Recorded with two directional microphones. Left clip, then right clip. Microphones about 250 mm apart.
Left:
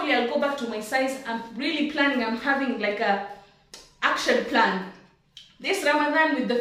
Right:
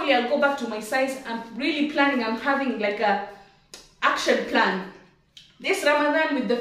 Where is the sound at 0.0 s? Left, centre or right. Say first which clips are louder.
Right 3 dB; centre.